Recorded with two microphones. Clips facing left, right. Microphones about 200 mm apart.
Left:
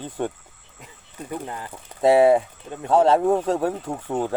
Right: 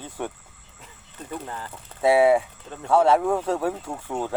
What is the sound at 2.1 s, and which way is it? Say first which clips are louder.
Speech: left 2 dB; 10° right (ahead or behind).